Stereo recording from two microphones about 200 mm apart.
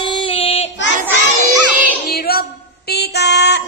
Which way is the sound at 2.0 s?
50° left (ahead or behind).